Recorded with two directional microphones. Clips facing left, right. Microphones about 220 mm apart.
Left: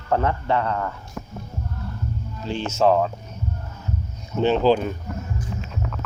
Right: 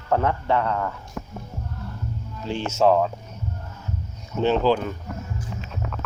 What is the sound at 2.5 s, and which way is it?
Speech, 10° right (ahead or behind).